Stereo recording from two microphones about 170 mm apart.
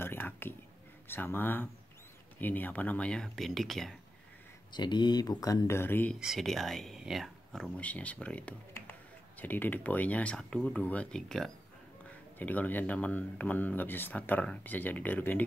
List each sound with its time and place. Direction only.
0.0 s a sound: 10° left (ahead or behind)
1.0 s speech: 15° left (ahead or behind)
4.7 s speech: 25° left (ahead or behind)
6.1 s speech: centre (ahead or behind)